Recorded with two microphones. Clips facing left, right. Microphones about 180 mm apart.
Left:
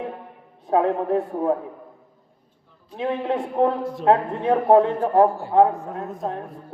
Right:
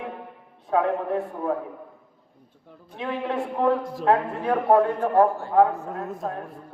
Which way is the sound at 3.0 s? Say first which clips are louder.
Left 3 dB; 30° left (ahead or behind).